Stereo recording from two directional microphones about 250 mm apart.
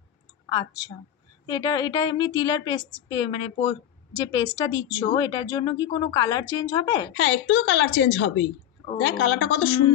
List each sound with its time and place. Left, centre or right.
0.5 s speech: centre
7.2 s a woman's voice: left